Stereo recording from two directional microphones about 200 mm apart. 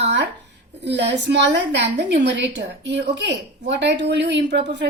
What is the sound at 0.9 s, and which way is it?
A woman's voice, 60° right (ahead or behind).